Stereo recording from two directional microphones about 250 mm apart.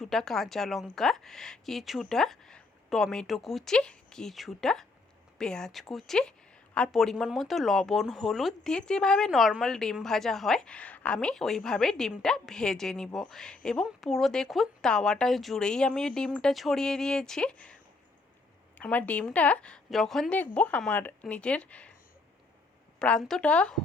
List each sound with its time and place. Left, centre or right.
0.0 s speech: centre
18.8 s speech: centre
23.0 s speech: centre